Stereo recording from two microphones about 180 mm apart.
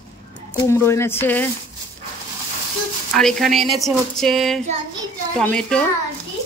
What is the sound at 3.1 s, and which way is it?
Speech, centre (ahead or behind).